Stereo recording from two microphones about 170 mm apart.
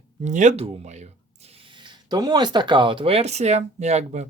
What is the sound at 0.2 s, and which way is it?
Speech, 45° right (ahead or behind).